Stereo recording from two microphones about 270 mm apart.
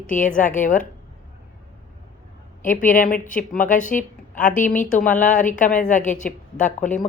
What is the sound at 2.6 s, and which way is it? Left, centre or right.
Speech, left.